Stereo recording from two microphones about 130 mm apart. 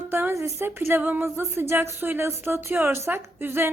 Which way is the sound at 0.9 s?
15° right (ahead or behind).